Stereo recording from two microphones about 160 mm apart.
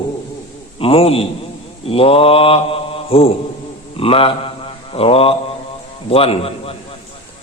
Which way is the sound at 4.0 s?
35° left (ahead or behind).